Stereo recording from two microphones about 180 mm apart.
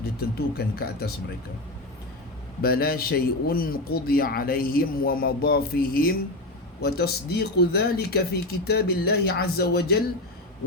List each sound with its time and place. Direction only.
0.0 s speech: 60° left (ahead or behind)
2.6 s speech: 55° left (ahead or behind)